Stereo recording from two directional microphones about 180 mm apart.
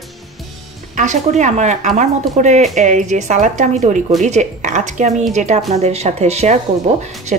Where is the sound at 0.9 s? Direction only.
40° right (ahead or behind).